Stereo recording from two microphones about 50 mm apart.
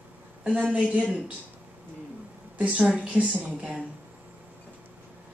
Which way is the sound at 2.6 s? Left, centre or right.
Right.